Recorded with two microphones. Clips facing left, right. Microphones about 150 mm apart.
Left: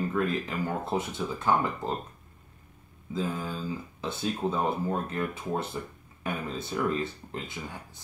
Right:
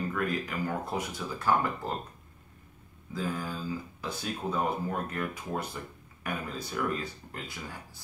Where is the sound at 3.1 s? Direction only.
20° left (ahead or behind).